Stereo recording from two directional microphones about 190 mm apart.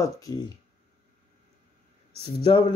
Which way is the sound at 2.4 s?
25° left (ahead or behind).